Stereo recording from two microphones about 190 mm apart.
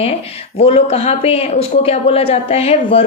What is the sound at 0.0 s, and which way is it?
Speech, 30° left (ahead or behind).